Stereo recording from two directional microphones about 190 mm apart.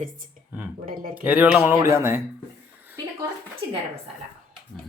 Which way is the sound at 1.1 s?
10° right (ahead or behind).